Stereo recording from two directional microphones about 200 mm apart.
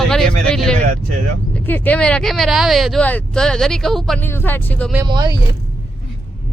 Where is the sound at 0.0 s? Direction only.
5° left (ahead or behind).